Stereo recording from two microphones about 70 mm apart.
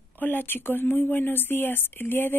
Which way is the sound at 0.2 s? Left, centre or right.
Left.